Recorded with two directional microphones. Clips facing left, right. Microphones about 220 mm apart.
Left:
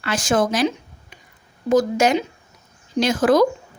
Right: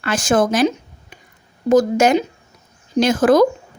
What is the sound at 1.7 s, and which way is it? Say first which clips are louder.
Speech: right 3 dB; 45° right (ahead or behind).